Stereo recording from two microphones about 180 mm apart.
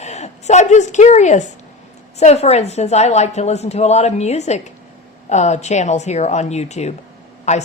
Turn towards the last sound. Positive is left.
turn(degrees=40)  # may be behind; listen again after turning